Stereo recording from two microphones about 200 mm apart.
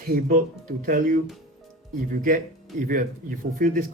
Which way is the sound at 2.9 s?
45° right (ahead or behind).